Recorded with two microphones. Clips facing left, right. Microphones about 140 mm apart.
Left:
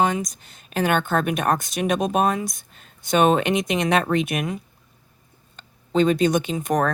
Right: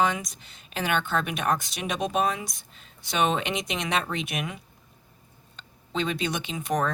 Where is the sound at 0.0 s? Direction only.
40° left (ahead or behind).